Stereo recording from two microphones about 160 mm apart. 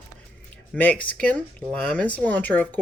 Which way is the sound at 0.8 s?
10° left (ahead or behind).